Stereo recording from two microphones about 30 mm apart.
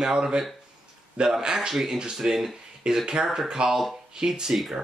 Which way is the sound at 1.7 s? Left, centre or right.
Centre.